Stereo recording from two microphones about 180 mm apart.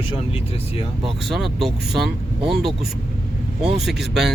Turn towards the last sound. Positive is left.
turn(degrees=0)  # may be behind; listen again after turning